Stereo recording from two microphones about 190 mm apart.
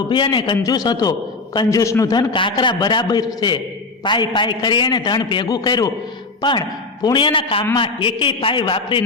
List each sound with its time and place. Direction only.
0.1 s a man's voice: 25° left (ahead or behind)
7.0 s a man's voice: 25° left (ahead or behind)